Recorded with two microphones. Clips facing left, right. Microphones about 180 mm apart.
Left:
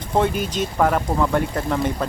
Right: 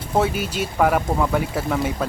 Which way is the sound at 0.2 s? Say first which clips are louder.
Left 1 dB; 5° right (ahead or behind).